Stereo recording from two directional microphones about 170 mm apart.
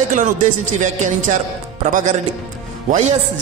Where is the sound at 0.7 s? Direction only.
45° right (ahead or behind).